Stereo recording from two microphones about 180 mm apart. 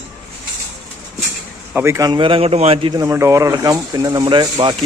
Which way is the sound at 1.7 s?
15° right (ahead or behind).